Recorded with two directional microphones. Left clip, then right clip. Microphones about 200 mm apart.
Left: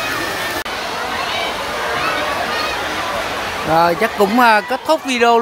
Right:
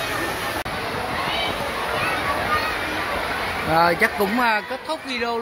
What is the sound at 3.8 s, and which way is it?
Speech, 15° left (ahead or behind).